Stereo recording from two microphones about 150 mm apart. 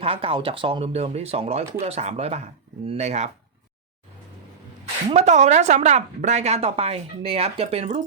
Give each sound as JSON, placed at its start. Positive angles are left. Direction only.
{"t": 0.0, "sound": "speech", "side_deg": -40}
{"t": 5.1, "sound": "speech", "side_deg": -50}